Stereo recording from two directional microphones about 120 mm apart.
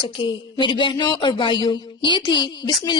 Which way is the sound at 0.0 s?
40° left (ahead or behind).